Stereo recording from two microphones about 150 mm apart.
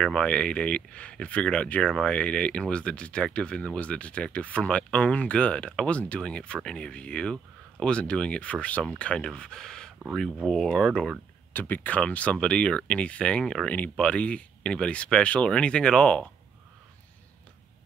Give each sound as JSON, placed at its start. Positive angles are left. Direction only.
{"t": 0.0, "sound": "speech", "side_deg": 5}